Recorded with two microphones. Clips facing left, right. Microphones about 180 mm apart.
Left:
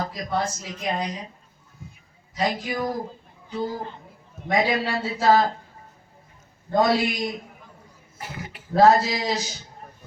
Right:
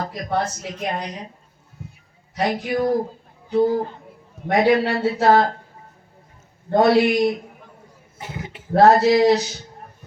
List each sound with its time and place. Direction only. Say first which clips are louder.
0.0 s speech: right 2 dB; 60° right (ahead or behind)
2.3 s speech: right 4 dB; 65° right (ahead or behind)
6.7 s speech: right 5 dB; 60° right (ahead or behind)
8.2 s speech: right 3 dB; 25° right (ahead or behind)
8.7 s speech: right 4 dB; 65° right (ahead or behind)